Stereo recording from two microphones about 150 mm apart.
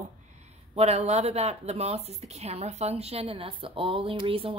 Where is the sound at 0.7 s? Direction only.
45° right (ahead or behind).